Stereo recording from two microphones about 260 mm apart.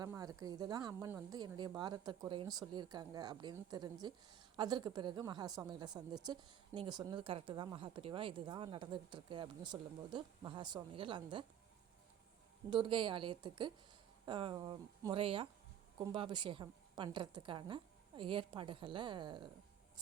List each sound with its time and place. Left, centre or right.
0.0 s a woman's voice: centre
12.7 s a woman's voice: centre